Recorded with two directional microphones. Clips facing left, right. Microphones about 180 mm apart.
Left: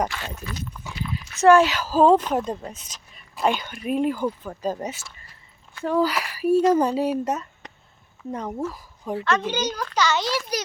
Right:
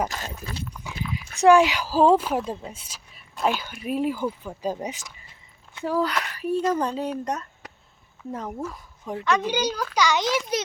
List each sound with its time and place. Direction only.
0.1 s speech: 40° right (ahead or behind)
1.1 s speech: 15° right (ahead or behind)
5.9 s speech: 5° left (ahead or behind)
7.6 s a sound: 5° right (ahead or behind)
8.3 s speech: centre (ahead or behind)
9.2 s a child's voice: 15° right (ahead or behind)